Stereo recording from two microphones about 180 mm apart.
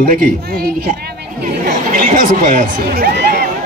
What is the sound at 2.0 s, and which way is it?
Speech, 50° right (ahead or behind).